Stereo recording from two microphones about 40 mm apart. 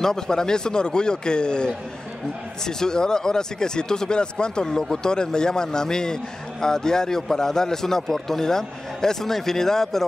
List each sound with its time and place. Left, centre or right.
0.0 s a man's voice: centre